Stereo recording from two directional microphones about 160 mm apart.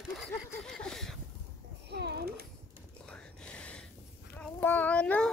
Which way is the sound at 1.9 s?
90° right.